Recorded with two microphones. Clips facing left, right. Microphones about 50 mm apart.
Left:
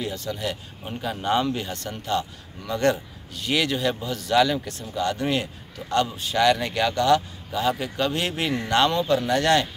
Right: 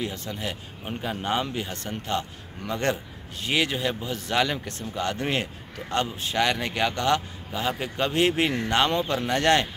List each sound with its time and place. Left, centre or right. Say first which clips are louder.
0.0 s a man's voice: left 2 dB; right
1.8 s a man's voice: left 2 dB; right